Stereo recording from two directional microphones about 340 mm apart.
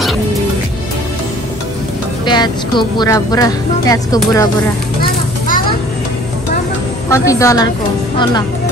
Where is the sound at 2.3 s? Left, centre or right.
Centre.